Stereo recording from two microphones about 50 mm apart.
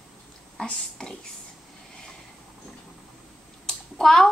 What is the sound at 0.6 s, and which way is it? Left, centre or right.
Speech, centre.